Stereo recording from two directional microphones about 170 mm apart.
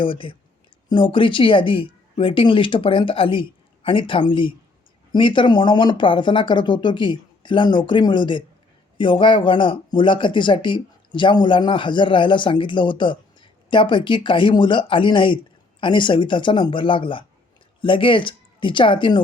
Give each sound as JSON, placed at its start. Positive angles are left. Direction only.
{"t": 0.0, "sound": "speech", "side_deg": 30}